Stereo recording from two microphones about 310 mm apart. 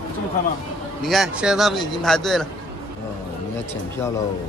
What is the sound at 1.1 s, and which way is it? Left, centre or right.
Speech, centre.